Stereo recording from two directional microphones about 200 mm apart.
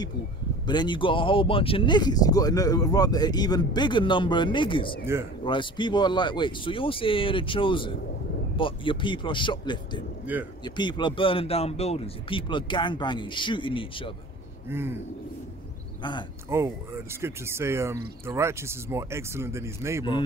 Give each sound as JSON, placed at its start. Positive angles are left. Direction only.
{"t": 0.7, "sound": "speech", "side_deg": 20}
{"t": 14.7, "sound": "speech", "side_deg": -10}
{"t": 16.0, "sound": "speech", "side_deg": 25}
{"t": 16.4, "sound": "speech", "side_deg": -15}